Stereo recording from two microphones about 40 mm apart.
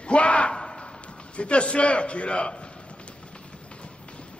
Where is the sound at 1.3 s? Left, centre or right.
Left.